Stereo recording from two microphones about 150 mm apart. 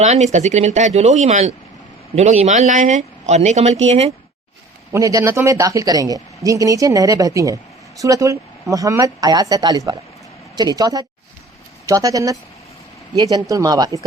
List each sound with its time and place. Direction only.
0.0 s speech: 50° right (ahead or behind)
4.9 s speech: 20° right (ahead or behind)